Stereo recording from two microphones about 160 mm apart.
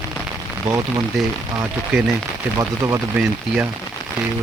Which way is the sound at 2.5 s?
20° right (ahead or behind).